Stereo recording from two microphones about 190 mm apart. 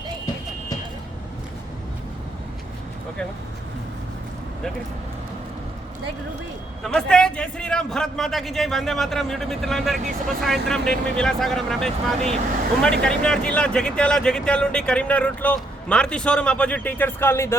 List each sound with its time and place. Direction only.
6.8 s speech: 5° left (ahead or behind)